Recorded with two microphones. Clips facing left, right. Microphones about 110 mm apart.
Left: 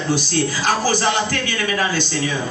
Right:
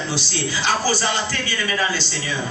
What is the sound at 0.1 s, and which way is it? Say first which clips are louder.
Speech: left 6 dB; 45° left (ahead or behind).